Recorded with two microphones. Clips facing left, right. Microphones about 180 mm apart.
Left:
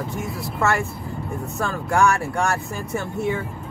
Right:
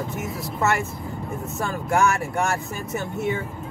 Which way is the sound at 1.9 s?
20° right (ahead or behind).